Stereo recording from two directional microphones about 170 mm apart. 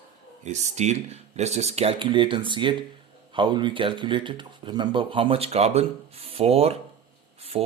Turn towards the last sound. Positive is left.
turn(degrees=-35)  # may be behind; listen again after turning